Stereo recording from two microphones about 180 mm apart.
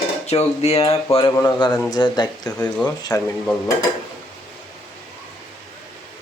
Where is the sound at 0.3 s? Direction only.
35° left (ahead or behind).